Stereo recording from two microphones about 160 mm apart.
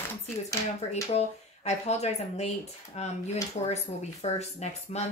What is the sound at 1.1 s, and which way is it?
Speech, 40° left (ahead or behind).